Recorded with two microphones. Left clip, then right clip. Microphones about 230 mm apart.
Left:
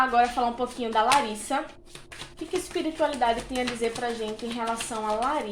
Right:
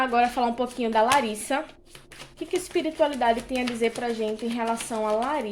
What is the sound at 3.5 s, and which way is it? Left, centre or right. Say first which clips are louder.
A woman's voice: right 2 dB; right.